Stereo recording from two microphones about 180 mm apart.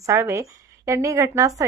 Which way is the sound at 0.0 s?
15° right (ahead or behind).